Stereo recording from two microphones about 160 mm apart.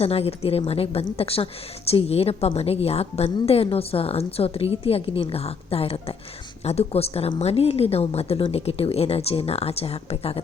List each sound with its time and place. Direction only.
0.0 s a woman's voice: 40° left (ahead or behind)